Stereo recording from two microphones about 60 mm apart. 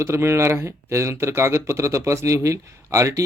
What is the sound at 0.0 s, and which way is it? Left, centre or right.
Speech, right.